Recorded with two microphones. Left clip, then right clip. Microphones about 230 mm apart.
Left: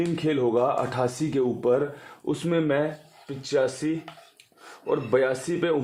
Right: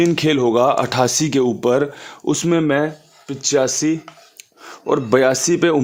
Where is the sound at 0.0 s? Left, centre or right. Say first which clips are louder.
Right 9 dB; right.